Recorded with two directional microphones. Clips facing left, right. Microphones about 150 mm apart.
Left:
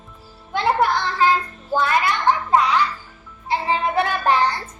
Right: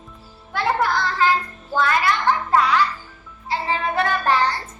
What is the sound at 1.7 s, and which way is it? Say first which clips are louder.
Speech: even; 20° left (ahead or behind).